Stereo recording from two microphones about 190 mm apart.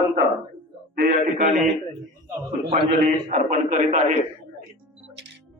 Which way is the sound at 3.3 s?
40° right (ahead or behind).